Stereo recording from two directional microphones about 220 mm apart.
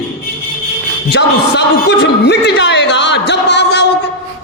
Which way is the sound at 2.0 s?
50° left (ahead or behind).